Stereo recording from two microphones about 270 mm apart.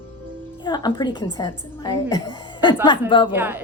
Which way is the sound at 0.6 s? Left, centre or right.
Centre.